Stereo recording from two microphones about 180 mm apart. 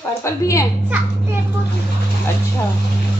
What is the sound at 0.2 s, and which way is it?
Speech, 15° left (ahead or behind).